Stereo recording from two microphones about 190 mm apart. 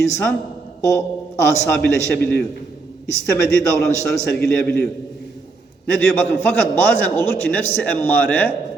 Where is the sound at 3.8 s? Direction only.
5° left (ahead or behind).